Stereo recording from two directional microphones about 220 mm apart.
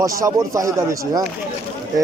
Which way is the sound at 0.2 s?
15° right (ahead or behind).